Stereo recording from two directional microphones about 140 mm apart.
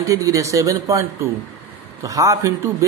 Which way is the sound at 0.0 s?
25° right (ahead or behind).